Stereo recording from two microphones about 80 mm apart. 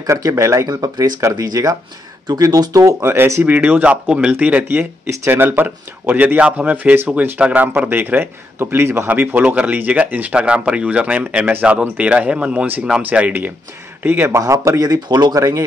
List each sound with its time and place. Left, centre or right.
0.0 s speech: right
0.7 s speech: right
3.0 s speech: right
3.4 s speech: right
14.4 s speech: right